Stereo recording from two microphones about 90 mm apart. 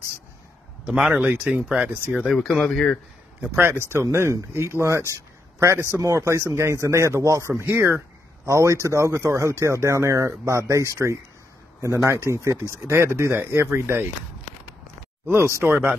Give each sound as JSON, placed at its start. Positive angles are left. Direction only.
{"t": 0.8, "sound": "speech", "side_deg": -10}
{"t": 1.1, "sound": "speech", "side_deg": -20}
{"t": 2.1, "sound": "speech", "side_deg": 0}
{"t": 3.5, "sound": "speech", "side_deg": -25}
{"t": 15.2, "sound": "speech", "side_deg": -30}